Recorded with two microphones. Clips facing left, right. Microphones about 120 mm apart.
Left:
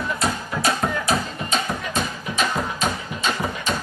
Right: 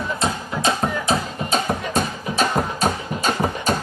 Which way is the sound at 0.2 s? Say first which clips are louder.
Right 2 dB; 25° right (ahead or behind).